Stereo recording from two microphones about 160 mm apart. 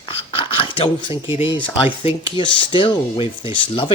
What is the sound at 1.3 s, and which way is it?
Speech, 15° right (ahead or behind).